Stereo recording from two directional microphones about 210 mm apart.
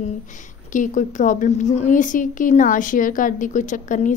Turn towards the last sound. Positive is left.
turn(degrees=35)  # may be behind; listen again after turning